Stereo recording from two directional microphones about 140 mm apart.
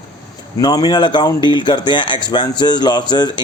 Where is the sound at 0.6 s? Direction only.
30° left (ahead or behind).